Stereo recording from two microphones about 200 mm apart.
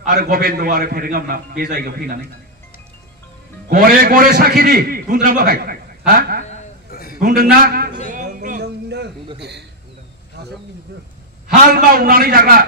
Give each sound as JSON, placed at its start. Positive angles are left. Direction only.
{"t": 0.0, "sound": "a man's voice", "side_deg": -50}
{"t": 3.6, "sound": "a man's voice", "side_deg": -45}
{"t": 6.9, "sound": "a sound", "side_deg": 50}
{"t": 7.2, "sound": "a man's voice", "side_deg": -45}
{"t": 8.1, "sound": "a sound", "side_deg": -45}
{"t": 11.4, "sound": "a man's voice", "side_deg": -50}